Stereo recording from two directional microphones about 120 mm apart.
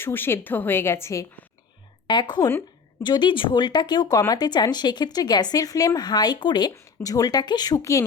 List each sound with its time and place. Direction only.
0.0 s a woman's voice: 20° left (ahead or behind)
2.0 s a woman's voice: 40° left (ahead or behind)